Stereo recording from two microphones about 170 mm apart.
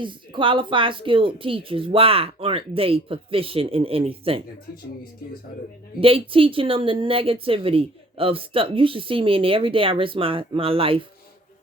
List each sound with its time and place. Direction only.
0.0 s speech: 30° right (ahead or behind)
6.0 s speech: 35° right (ahead or behind)